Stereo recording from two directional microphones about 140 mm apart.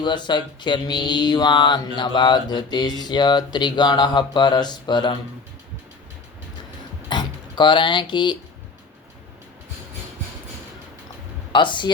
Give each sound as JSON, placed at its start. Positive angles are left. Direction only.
{"t": 0.0, "sound": "speech", "side_deg": 35}
{"t": 7.1, "sound": "speech", "side_deg": 30}
{"t": 11.5, "sound": "speech", "side_deg": 35}